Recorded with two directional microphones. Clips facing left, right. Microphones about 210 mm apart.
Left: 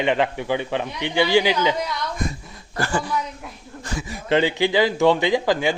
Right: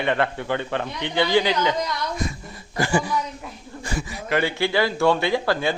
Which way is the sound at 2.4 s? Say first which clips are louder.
Right 3 dB; centre (ahead or behind).